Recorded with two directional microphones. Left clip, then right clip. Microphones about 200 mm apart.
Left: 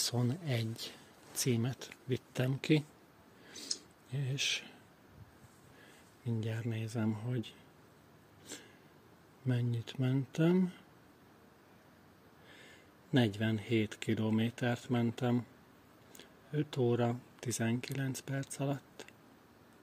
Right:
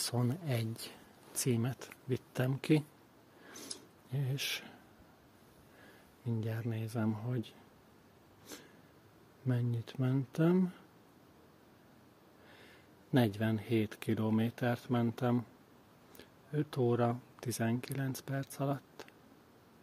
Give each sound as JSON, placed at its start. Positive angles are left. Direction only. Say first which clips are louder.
{"t": 0.0, "sound": "speech", "louder": "left 1 dB", "side_deg": 0}
{"t": 3.7, "sound": "a sound", "louder": "left 9 dB", "side_deg": -30}
{"t": 4.1, "sound": "speech", "louder": "left 3 dB", "side_deg": -5}
{"t": 6.2, "sound": "speech", "louder": "even", "side_deg": 0}
{"t": 9.5, "sound": "speech", "louder": "even", "side_deg": 0}
{"t": 12.5, "sound": "speech", "louder": "left 1 dB", "side_deg": 0}